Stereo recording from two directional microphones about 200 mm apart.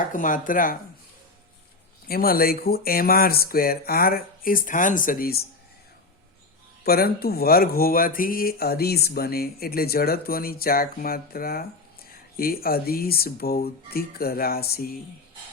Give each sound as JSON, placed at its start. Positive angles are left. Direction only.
{"t": 0.0, "sound": "speech", "side_deg": 40}
{"t": 2.0, "sound": "speech", "side_deg": 50}
{"t": 6.8, "sound": "speech", "side_deg": 50}